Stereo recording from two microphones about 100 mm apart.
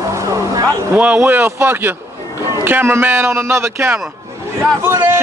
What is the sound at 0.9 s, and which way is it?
Speech, 15° right (ahead or behind).